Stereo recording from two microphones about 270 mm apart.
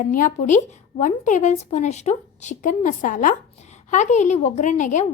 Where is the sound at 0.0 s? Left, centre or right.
Left.